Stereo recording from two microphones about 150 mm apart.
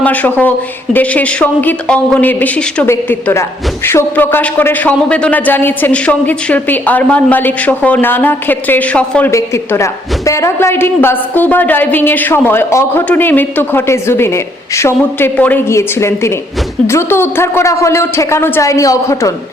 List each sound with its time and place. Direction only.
0.0 s a woman's voice: 10° left (ahead or behind)
9.3 s a woman's voice: 20° left (ahead or behind)